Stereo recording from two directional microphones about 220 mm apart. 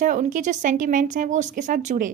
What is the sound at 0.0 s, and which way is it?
A woman's voice, 35° right (ahead or behind).